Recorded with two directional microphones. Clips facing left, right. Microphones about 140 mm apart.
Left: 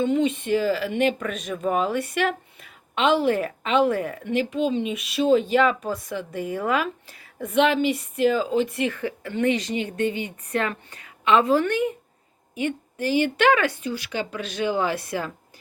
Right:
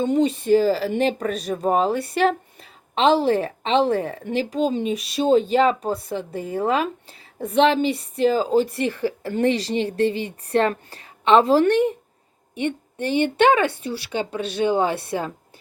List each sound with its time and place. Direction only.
0.0 s speech: 35° right (ahead or behind)
13.4 s speech: 25° right (ahead or behind)